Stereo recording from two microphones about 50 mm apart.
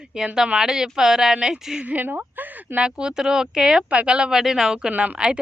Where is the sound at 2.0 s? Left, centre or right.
Right.